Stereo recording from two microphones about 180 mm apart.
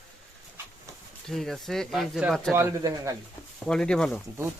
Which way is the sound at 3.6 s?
5° left (ahead or behind).